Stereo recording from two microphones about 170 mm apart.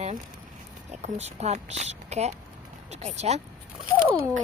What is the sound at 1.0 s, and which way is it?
Speech, 40° right (ahead or behind).